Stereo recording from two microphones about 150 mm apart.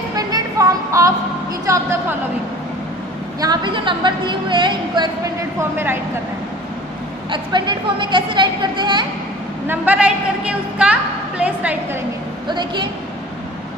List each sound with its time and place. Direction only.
0.1 s a sound: 25° right (ahead or behind)
1.7 s music: 20° right (ahead or behind)
3.3 s a woman's voice: 30° right (ahead or behind)
5.6 s a woman's voice: 15° right (ahead or behind)
7.2 s a woman's voice: 30° right (ahead or behind)
9.7 s a woman's voice: 10° right (ahead or behind)
12.4 s a woman's voice: 30° right (ahead or behind)